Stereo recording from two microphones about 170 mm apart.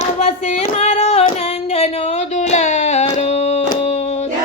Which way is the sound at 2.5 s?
45° left (ahead or behind).